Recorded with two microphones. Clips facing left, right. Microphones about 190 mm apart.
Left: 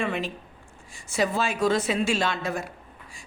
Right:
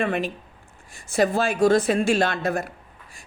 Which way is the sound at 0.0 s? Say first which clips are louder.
Right 4 dB; 55° right (ahead or behind).